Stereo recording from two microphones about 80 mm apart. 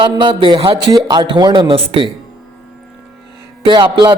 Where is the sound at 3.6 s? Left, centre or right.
Right.